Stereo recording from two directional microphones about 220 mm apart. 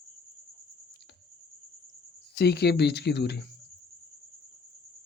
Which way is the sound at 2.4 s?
50° left (ahead or behind).